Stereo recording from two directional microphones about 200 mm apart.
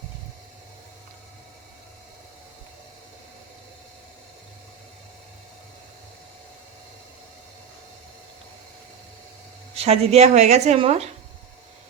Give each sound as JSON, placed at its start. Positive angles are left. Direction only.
{"t": 9.7, "sound": "a woman's voice", "side_deg": -30}